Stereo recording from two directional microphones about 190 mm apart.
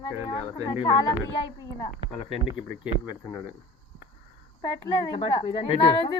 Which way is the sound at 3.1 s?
20° left (ahead or behind).